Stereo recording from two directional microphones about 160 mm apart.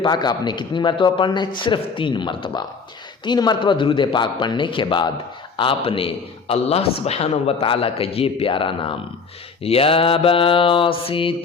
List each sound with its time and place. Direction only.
0.0 s a man's voice: 25° left (ahead or behind)